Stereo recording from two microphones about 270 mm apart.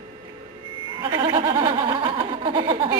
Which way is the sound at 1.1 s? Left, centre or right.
Centre.